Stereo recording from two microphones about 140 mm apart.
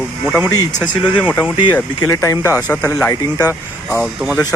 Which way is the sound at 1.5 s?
35° left (ahead or behind).